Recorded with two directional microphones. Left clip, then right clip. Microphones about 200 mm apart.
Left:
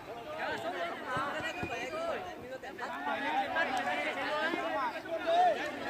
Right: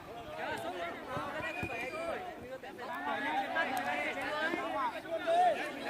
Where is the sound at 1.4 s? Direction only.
55° left (ahead or behind).